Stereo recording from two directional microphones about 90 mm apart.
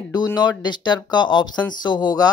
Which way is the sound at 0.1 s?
50° left (ahead or behind).